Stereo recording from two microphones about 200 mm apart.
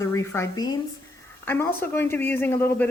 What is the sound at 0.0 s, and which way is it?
Speech, 15° left (ahead or behind).